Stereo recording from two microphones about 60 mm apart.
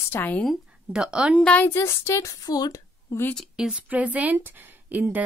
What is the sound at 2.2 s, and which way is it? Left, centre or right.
Speech, left.